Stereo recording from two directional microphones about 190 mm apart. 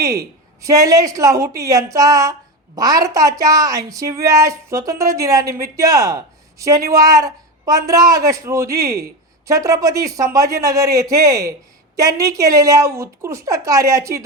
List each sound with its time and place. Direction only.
0.0 s a woman's voice: 15° right (ahead or behind)